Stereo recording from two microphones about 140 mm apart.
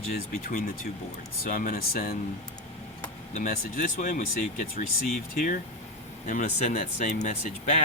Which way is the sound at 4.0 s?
65° left (ahead or behind).